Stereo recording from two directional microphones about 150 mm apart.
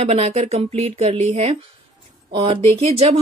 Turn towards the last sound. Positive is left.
turn(degrees=-45)  # may be behind; listen again after turning